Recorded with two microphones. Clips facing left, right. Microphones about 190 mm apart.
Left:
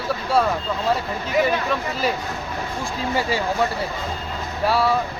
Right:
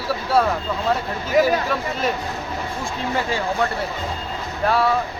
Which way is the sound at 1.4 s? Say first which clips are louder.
Right 1 dB; centre (ahead or behind).